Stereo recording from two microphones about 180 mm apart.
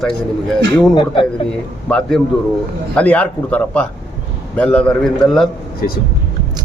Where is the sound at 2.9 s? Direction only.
5° left (ahead or behind).